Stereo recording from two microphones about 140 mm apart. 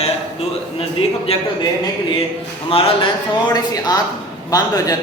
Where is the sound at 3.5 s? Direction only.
25° left (ahead or behind).